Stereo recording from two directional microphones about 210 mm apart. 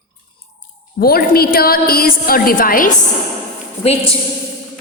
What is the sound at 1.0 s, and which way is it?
A woman's voice, 45° left (ahead or behind).